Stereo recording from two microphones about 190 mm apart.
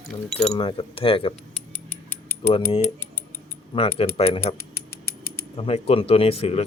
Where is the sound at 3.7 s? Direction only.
30° left (ahead or behind).